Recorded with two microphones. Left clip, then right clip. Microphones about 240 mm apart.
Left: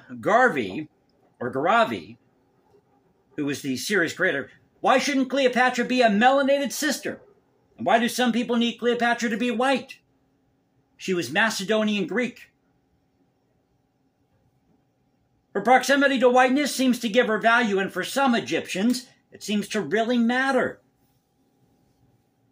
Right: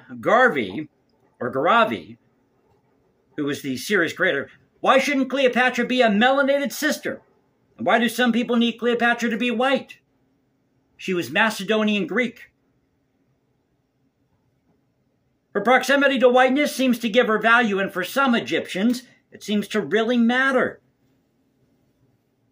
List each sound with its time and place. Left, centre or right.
0.0 s speech: centre
3.3 s speech: centre
11.1 s speech: centre
15.5 s speech: centre